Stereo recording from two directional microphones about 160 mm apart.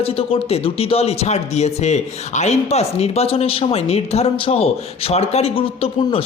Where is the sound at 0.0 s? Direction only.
35° left (ahead or behind).